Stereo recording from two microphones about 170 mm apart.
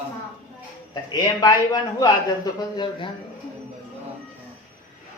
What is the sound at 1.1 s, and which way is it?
A man's voice, 25° left (ahead or behind).